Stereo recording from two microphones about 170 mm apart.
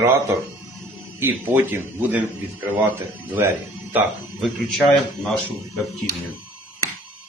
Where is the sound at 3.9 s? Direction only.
10° right (ahead or behind).